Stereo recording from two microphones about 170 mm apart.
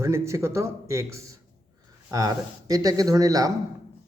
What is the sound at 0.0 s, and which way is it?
A man's voice, 15° right (ahead or behind).